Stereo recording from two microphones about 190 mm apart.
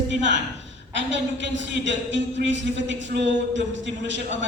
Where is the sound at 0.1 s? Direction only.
70° right (ahead or behind).